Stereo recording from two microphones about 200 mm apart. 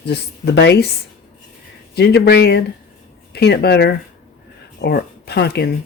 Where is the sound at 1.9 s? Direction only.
55° left (ahead or behind).